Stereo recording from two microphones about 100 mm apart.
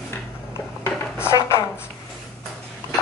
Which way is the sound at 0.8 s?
25° left (ahead or behind).